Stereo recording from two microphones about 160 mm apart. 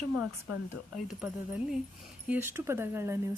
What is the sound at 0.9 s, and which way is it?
Speech, 5° right (ahead or behind).